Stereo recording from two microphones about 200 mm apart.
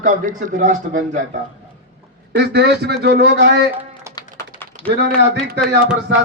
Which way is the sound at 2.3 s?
55° right (ahead or behind).